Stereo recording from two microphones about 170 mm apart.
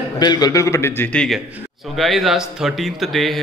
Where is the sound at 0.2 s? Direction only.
25° left (ahead or behind).